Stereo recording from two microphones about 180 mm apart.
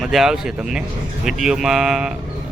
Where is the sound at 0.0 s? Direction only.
Centre (ahead or behind).